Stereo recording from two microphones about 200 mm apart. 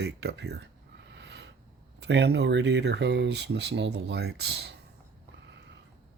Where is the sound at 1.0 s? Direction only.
60° right (ahead or behind).